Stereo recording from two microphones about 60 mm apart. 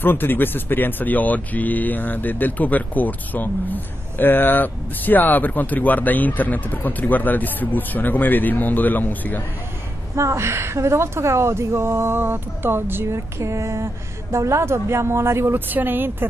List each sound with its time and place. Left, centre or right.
0.0 s speech: left
10.1 s speech: right
15.7 s speech: right